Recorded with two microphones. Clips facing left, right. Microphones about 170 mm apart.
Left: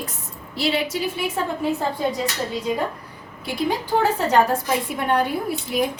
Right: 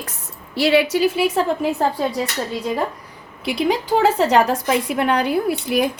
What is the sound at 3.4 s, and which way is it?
A woman's voice, 80° right.